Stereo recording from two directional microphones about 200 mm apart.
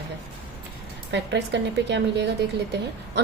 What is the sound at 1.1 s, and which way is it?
A woman's voice, 60° right (ahead or behind).